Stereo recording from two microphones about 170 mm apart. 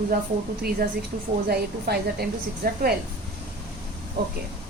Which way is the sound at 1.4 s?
65° right (ahead or behind).